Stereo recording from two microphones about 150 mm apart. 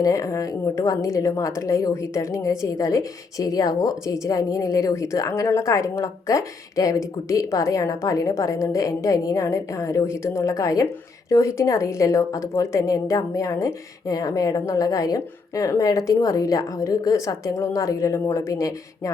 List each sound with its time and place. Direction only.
0.0 s a woman's voice: 20° left (ahead or behind)